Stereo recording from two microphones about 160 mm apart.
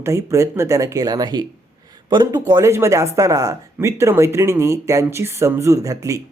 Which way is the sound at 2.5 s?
20° right (ahead or behind).